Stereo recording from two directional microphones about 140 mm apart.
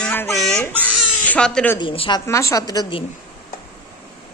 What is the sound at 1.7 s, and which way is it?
Speech, 35° left (ahead or behind).